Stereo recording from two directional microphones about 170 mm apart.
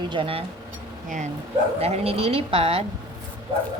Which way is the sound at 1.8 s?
35° right (ahead or behind).